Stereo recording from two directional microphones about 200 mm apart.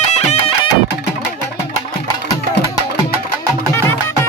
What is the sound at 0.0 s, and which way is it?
Music, 35° left (ahead or behind).